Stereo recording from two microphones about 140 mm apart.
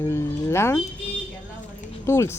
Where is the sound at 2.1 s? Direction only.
20° left (ahead or behind).